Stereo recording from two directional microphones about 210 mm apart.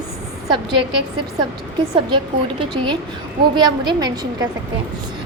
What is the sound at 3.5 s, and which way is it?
Speech, 20° right (ahead or behind).